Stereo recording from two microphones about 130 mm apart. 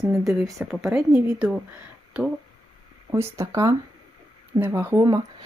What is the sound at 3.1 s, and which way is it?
A woman's voice, 20° right (ahead or behind).